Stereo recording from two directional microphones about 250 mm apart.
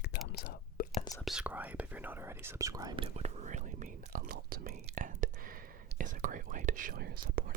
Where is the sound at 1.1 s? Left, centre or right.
Centre.